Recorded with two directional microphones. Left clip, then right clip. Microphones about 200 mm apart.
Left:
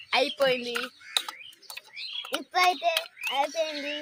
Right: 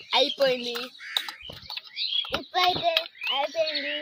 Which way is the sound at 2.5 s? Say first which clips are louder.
Left 1 dB; 5° right (ahead or behind).